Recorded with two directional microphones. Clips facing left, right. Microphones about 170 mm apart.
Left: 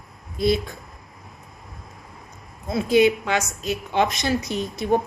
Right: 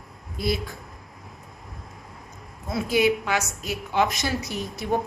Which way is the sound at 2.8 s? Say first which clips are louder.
Left 4 dB; 20° left (ahead or behind).